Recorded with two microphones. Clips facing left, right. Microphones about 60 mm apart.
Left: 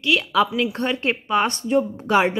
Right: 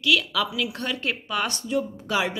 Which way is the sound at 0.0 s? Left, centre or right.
Left.